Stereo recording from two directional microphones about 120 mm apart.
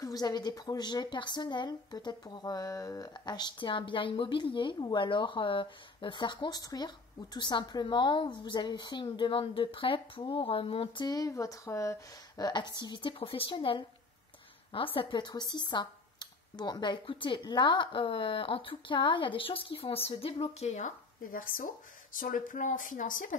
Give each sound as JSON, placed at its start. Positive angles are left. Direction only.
{"t": 0.0, "sound": "a woman's voice", "side_deg": 35}
{"t": 11.1, "sound": "a woman's voice", "side_deg": 30}
{"t": 22.5, "sound": "speech", "side_deg": 90}